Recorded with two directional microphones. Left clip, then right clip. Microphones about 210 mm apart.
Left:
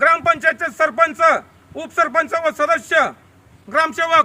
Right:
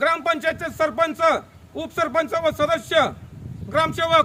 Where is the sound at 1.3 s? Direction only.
5° right (ahead or behind).